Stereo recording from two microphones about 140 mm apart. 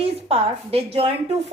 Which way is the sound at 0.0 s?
45° right (ahead or behind).